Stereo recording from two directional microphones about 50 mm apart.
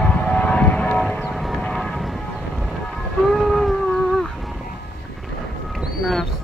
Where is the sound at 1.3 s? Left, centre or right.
Centre.